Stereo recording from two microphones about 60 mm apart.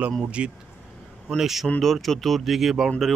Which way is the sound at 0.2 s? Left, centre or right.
Centre.